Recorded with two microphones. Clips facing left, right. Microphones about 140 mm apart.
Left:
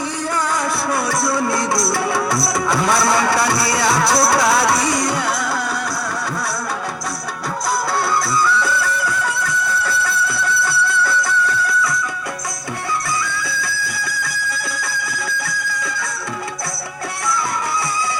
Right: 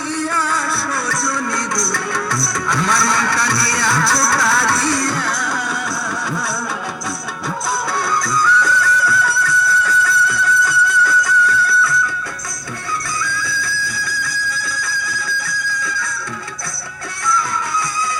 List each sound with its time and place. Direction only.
0.2 s music: 15° left (ahead or behind)
8.1 s music: 5° left (ahead or behind)
15.2 s music: 25° left (ahead or behind)